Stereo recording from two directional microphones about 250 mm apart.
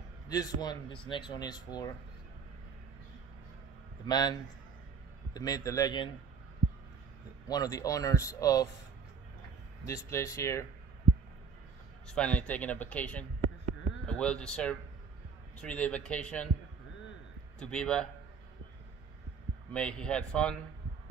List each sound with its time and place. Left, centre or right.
0.3 s speech: centre
4.0 s speech: centre
7.4 s speech: centre
9.8 s speech: centre
12.1 s speech: centre
17.6 s speech: centre
19.7 s speech: centre